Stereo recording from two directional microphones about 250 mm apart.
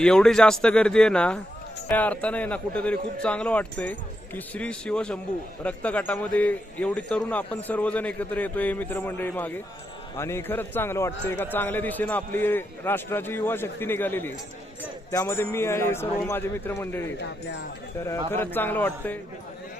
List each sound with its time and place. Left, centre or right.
0.0 s a man's voice: centre
17.2 s speech: left
18.0 s speech: centre